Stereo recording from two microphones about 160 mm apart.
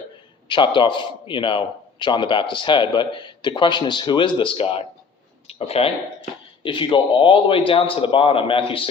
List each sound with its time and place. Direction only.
0.4 s a man's voice: 30° left (ahead or behind)